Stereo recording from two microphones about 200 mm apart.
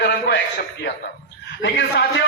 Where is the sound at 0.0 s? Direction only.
60° left (ahead or behind).